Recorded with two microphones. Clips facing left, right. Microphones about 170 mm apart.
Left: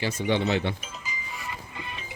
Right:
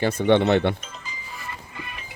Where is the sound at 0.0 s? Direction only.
60° right (ahead or behind).